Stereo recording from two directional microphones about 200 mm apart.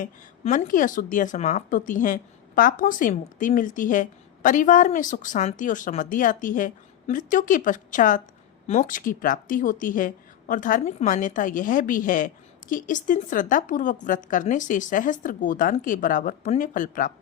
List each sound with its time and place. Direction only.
0.0 s a woman's voice: 40° left (ahead or behind)